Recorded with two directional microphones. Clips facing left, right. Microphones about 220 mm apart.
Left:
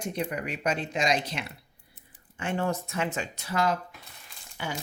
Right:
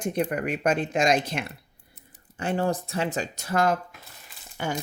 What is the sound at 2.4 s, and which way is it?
Speech, 35° right (ahead or behind).